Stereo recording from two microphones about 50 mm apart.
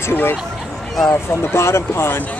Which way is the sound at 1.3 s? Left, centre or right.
Left.